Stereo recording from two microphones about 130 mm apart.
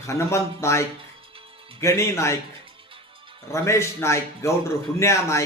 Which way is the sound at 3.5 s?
20° left (ahead or behind).